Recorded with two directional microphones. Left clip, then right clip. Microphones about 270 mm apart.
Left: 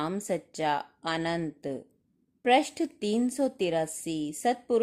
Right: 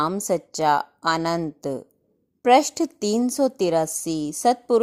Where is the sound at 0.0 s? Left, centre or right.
Centre.